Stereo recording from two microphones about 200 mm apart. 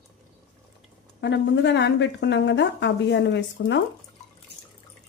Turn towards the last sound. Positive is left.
turn(degrees=65)  # may be behind; listen again after turning